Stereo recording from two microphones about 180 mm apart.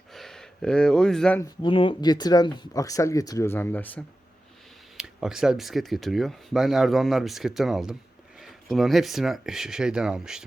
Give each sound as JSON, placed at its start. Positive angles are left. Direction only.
{"t": 0.1, "sound": "gasp", "side_deg": 0}
{"t": 1.4, "sound": "speech", "side_deg": 25}
{"t": 4.9, "sound": "speech", "side_deg": -5}